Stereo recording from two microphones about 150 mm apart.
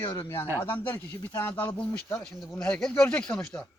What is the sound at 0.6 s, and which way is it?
Speech, 15° left (ahead or behind).